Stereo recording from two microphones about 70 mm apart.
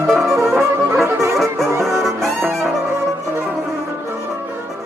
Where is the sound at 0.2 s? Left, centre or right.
Right.